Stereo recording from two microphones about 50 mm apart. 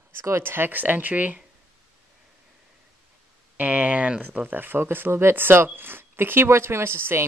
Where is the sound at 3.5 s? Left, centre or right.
Right.